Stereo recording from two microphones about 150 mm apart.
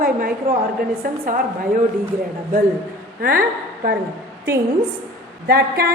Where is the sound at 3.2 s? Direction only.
75° right (ahead or behind).